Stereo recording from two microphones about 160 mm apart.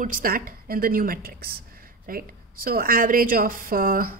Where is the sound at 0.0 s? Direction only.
60° right (ahead or behind).